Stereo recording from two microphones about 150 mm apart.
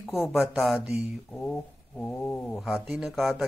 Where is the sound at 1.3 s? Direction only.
5° left (ahead or behind).